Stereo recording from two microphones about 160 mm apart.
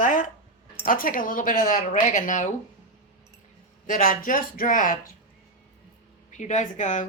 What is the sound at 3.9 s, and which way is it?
Speech, 50° left (ahead or behind).